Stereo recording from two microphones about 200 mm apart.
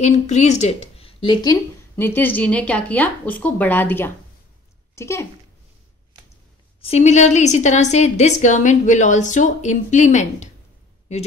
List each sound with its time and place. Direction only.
0.0 s a woman's voice: 35° left (ahead or behind); by 5.2 s 15° left (ahead or behind)
6.8 s a woman's voice: 30° left (ahead or behind)